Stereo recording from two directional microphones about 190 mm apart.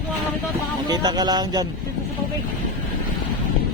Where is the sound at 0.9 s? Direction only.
20° right (ahead or behind).